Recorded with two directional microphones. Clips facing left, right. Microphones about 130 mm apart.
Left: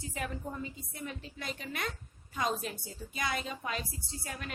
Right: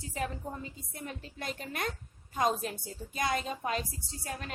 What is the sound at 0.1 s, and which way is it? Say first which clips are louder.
A woman's voice: right 3 dB; 35° right (ahead or behind).